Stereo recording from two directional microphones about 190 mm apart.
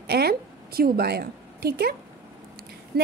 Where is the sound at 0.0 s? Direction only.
55° right (ahead or behind).